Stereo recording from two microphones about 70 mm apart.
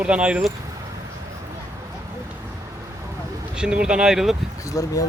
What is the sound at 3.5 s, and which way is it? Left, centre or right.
Speech, centre.